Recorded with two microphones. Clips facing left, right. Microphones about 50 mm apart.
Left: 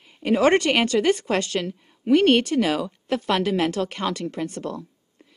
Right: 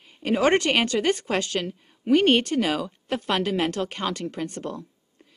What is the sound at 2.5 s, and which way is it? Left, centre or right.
A woman's voice, centre.